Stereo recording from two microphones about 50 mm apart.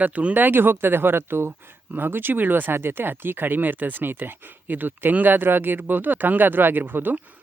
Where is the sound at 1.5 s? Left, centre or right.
Right.